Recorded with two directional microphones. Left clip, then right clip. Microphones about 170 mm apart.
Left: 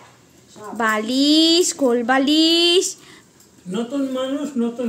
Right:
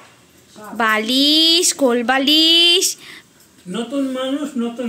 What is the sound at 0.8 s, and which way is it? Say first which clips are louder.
A woman's voice: right 3 dB; 5° left (ahead or behind).